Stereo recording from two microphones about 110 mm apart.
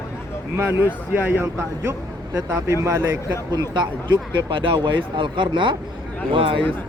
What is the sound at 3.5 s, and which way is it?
Speech, 40° right (ahead or behind).